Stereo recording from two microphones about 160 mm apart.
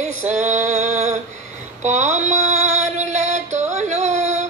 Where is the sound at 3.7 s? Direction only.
45° right (ahead or behind).